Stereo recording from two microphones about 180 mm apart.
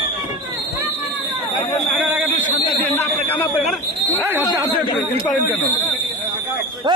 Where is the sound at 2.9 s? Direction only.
10° left (ahead or behind).